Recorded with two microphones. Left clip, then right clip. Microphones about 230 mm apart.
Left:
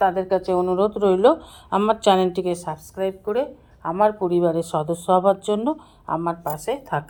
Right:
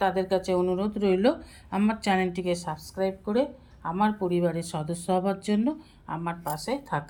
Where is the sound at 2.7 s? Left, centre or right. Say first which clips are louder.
Left 4 dB; left.